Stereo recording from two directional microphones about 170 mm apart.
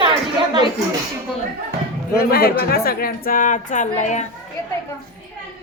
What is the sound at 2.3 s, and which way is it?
A woman's voice, 65° left (ahead or behind).